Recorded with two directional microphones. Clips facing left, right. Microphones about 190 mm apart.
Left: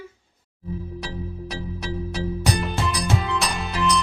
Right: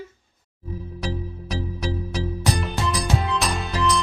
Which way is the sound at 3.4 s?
Centre (ahead or behind).